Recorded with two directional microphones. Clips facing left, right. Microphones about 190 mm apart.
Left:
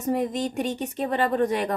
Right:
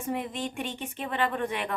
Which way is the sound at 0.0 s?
40° left (ahead or behind).